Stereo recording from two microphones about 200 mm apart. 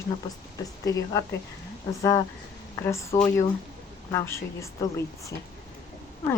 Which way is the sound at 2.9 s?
15° left (ahead or behind).